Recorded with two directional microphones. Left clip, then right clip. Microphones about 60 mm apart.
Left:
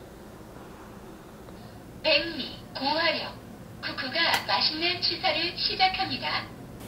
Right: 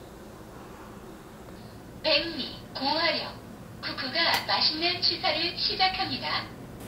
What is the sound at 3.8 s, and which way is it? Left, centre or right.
A woman's voice, centre.